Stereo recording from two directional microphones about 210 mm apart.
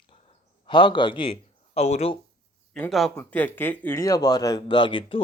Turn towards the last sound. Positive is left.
turn(degrees=25)  # may be behind; listen again after turning